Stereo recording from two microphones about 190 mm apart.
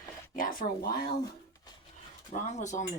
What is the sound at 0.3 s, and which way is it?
Speech, 50° left (ahead or behind).